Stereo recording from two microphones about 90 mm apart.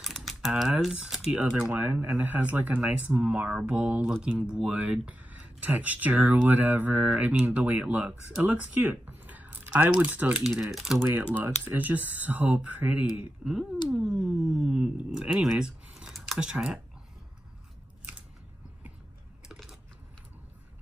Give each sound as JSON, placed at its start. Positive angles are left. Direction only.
{"t": 0.0, "sound": "speech", "side_deg": 0}
{"t": 1.6, "sound": "speech", "side_deg": -20}
{"t": 10.4, "sound": "speech", "side_deg": -5}
{"t": 11.0, "sound": "speech", "side_deg": -25}
{"t": 13.4, "sound": "a sound", "side_deg": -5}
{"t": 13.9, "sound": "speech", "side_deg": -5}
{"t": 19.5, "sound": "typing", "side_deg": 0}